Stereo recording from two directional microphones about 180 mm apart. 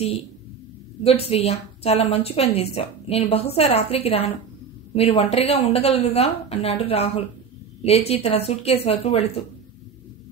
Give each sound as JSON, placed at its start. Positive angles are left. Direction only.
{"t": 1.0, "sound": "a woman's voice", "side_deg": 35}